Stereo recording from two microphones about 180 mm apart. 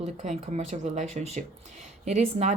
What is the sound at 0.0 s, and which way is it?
Speech, 35° right (ahead or behind).